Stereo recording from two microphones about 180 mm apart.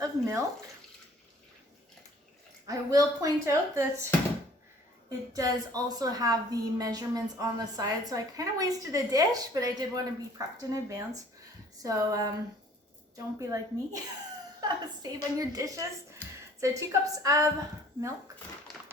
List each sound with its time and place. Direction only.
0.0 s water tap: 20° right (ahead or behind)
2.6 s a woman's voice: 20° right (ahead or behind)
5.3 s a woman's voice: 20° right (ahead or behind)